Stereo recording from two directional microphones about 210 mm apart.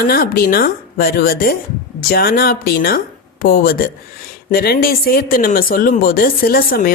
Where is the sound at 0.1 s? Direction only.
45° left (ahead or behind).